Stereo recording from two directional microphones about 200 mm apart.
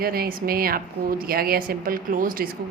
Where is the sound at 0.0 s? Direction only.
50° right (ahead or behind).